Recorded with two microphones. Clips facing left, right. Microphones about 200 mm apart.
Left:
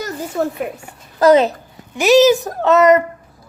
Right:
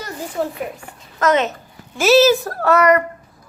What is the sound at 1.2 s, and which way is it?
Speech, 35° left (ahead or behind).